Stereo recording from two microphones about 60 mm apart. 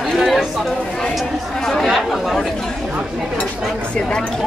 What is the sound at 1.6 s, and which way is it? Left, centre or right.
Speech, centre.